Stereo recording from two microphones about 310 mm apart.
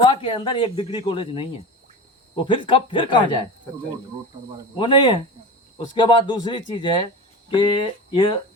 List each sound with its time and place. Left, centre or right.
0.0 s speech: centre
4.8 s speech: centre